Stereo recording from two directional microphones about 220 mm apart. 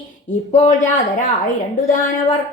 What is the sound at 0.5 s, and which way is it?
Speech, 35° left (ahead or behind).